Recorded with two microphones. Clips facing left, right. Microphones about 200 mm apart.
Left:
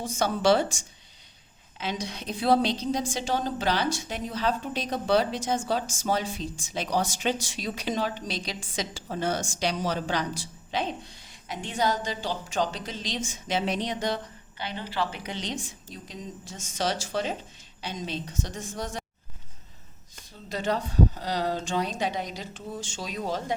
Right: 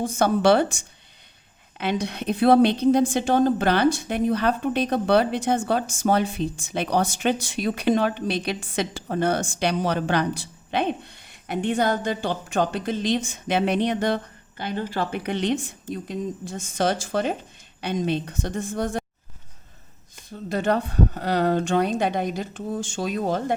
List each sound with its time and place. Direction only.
0.0 s a woman's voice: 55° right (ahead or behind)
1.8 s a woman's voice: 60° right (ahead or behind)
20.5 s a woman's voice: 55° right (ahead or behind)